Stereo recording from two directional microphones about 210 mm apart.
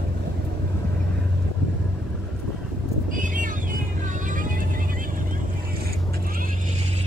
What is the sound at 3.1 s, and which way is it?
Vehicle, 40° right (ahead or behind).